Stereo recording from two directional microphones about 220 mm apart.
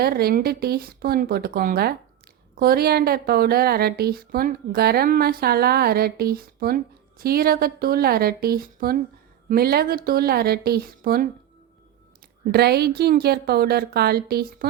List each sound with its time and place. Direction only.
0.0 s speech: 45° right (ahead or behind)
12.5 s speech: 45° right (ahead or behind)